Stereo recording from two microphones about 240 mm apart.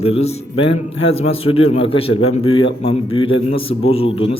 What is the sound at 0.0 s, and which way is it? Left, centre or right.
Speech, left.